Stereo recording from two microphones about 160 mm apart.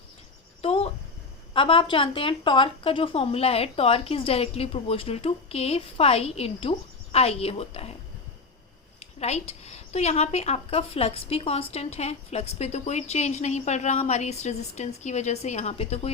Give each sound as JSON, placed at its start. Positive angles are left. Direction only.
{"t": 0.6, "sound": "a sound", "side_deg": 35}
{"t": 1.5, "sound": "a woman's voice", "side_deg": 35}
{"t": 9.0, "sound": "a woman's voice", "side_deg": 40}